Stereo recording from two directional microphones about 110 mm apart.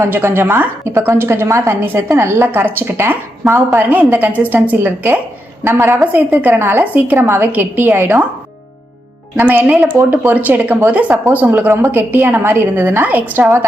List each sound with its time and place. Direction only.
0.0 s a woman's voice: 20° right (ahead or behind)
9.3 s a woman's voice: 15° right (ahead or behind)